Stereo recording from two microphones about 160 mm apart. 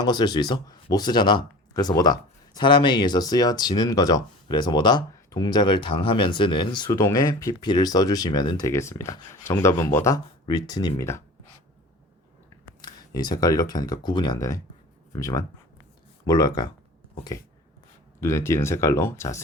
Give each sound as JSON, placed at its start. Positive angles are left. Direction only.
{"t": 0.0, "sound": "speech", "side_deg": 25}
{"t": 12.8, "sound": "speech", "side_deg": 25}
{"t": 18.2, "sound": "speech", "side_deg": 15}